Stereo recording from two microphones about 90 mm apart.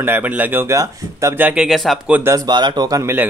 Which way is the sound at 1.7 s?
Centre (ahead or behind).